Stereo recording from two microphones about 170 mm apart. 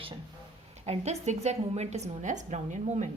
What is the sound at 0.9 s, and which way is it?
A woman's voice, 40° right (ahead or behind).